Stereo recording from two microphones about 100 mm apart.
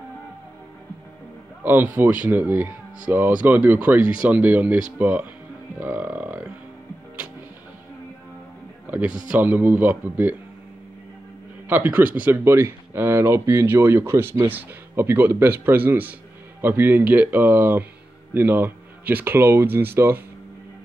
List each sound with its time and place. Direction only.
1.6 s speech: 20° right (ahead or behind)
8.8 s music: 20° right (ahead or behind)
9.1 s speech: 15° right (ahead or behind)
11.7 s speech: 15° right (ahead or behind)